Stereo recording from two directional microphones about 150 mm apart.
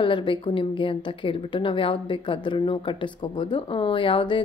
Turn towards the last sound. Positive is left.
turn(degrees=35)  # may be behind; listen again after turning